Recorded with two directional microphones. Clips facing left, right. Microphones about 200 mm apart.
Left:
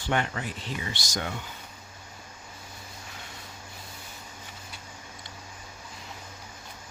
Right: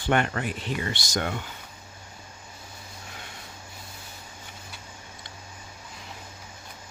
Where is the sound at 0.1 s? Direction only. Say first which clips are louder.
Right 4 dB; 60° right (ahead or behind).